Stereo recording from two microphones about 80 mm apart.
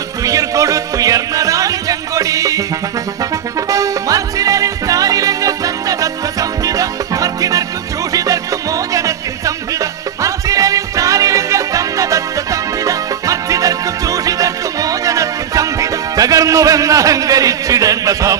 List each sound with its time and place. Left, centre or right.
0.2 s music: right
3.7 s music: right
9.8 s music: right